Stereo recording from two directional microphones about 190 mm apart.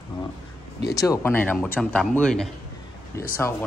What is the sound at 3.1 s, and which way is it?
Speech, 15° left (ahead or behind).